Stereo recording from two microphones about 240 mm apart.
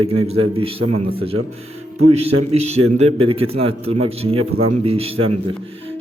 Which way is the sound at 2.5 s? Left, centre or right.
Right.